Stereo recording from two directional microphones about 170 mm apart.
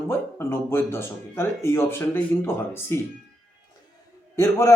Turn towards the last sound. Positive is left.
turn(degrees=15)  # may be behind; listen again after turning